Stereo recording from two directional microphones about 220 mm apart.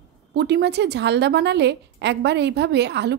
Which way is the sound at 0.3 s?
50° right (ahead or behind).